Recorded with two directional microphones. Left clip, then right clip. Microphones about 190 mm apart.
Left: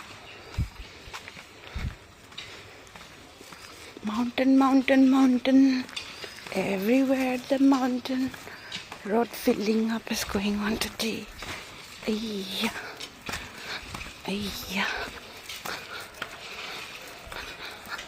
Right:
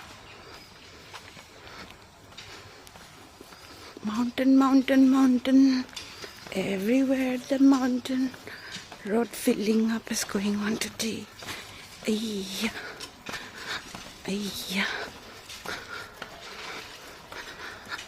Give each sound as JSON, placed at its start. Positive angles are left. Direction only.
{"t": 4.1, "sound": "speech", "side_deg": -10}
{"t": 14.3, "sound": "speech", "side_deg": -20}
{"t": 17.9, "sound": "dog", "side_deg": -35}